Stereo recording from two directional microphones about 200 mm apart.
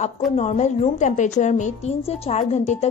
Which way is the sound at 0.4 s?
35° left (ahead or behind).